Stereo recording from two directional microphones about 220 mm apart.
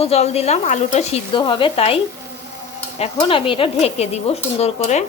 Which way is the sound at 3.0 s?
25° left (ahead or behind).